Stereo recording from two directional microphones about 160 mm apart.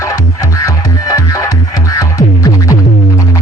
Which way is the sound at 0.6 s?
20° left (ahead or behind).